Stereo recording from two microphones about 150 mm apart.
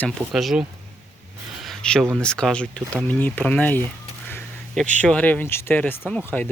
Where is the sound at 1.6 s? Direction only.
5° left (ahead or behind).